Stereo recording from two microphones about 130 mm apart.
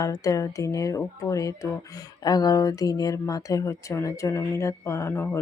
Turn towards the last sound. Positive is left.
turn(degrees=20)  # may be behind; listen again after turning